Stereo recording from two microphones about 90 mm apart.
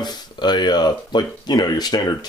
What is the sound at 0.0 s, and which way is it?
Speech, 55° left (ahead or behind).